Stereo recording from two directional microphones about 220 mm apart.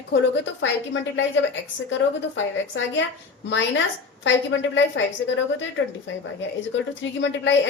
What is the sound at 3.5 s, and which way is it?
A woman's voice, 55° left (ahead or behind).